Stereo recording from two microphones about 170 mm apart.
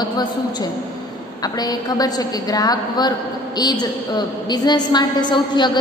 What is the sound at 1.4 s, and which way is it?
A woman's voice, 20° left (ahead or behind).